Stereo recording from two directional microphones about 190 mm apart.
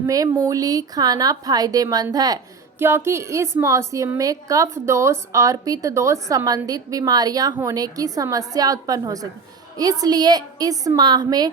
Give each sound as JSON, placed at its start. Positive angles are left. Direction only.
{"t": 0.0, "sound": "a woman's voice", "side_deg": -15}